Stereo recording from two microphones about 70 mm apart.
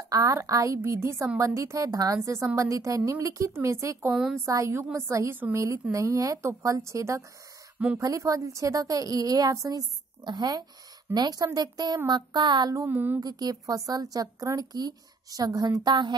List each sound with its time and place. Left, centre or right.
0.1 s a woman's voice: right
4.1 s a woman's voice: centre
4.5 s speech: right
5.3 s a woman's voice: right
5.6 s speech: right
11.1 s a woman's voice: right
12.1 s music: right
12.9 s a woman's voice: right
13.2 s speech: right